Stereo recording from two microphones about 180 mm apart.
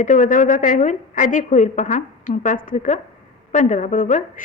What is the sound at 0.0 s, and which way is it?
A woman's voice, 45° left (ahead or behind).